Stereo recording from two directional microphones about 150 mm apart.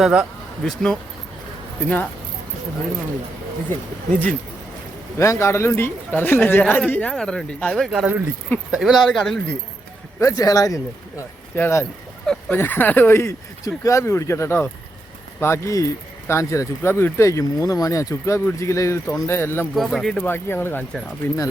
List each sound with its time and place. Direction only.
0.0 s speech: 5° right (ahead or behind)
3.7 s speech: 10° left (ahead or behind)
7.9 s speech: 5° right (ahead or behind)
10.2 s speech: 20° left (ahead or behind)
19.7 s speech: centre (ahead or behind)
20.2 s speech: 15° left (ahead or behind)